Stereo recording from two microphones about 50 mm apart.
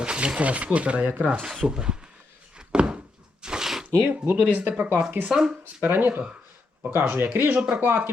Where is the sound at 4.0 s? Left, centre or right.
Right.